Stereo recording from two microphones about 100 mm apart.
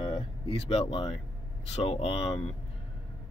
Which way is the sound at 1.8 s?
70° left (ahead or behind).